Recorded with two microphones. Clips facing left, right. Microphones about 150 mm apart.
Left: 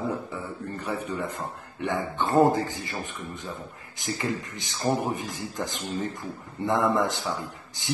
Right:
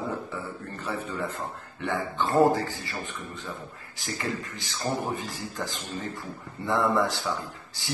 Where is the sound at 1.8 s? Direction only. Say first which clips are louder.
Left 1 dB; 20° left (ahead or behind).